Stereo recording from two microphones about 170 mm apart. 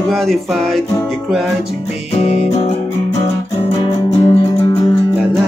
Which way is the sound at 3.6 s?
30° left (ahead or behind).